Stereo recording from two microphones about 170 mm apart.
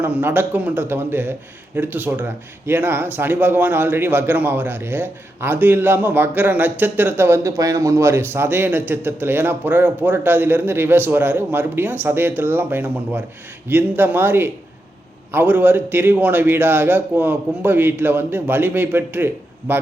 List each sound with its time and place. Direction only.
0.0 s a man's voice: 10° right (ahead or behind)